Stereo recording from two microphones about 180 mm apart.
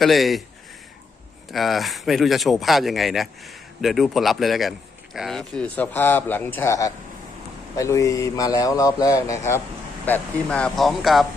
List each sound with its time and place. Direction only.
0.0 s speech: centre (ahead or behind)
1.5 s speech: centre (ahead or behind)